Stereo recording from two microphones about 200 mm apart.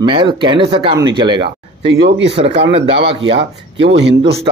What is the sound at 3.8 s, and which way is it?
Speech, 60° right (ahead or behind).